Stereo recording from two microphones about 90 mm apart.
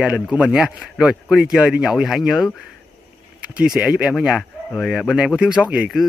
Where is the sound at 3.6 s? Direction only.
10° right (ahead or behind).